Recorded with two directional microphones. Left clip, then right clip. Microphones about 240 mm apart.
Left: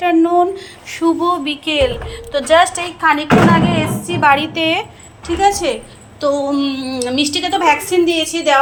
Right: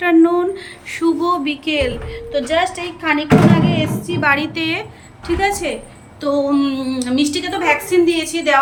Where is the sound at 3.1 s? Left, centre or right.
Left.